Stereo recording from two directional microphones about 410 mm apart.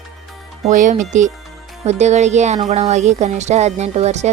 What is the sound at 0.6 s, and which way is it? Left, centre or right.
Speech, centre.